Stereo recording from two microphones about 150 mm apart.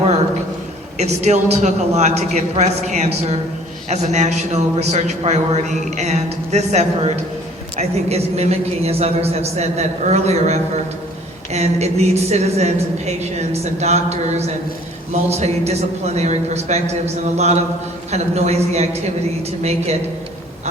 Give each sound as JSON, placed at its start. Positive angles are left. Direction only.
{"t": 0.9, "sound": "a man's voice", "side_deg": -50}